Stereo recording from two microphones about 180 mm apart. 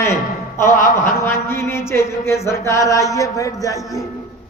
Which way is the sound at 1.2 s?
15° left (ahead or behind).